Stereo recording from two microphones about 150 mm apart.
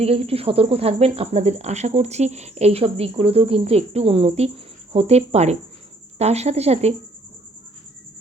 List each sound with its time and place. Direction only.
0.0 s speech: 40° right (ahead or behind)